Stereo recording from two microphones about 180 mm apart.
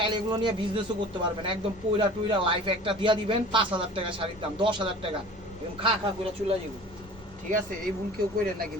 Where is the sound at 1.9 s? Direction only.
30° right (ahead or behind).